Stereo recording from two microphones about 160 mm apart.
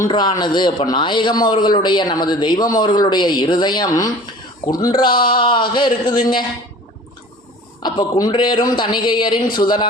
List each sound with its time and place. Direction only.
0.1 s a man's voice: 30° left (ahead or behind)
7.8 s a man's voice: 25° left (ahead or behind)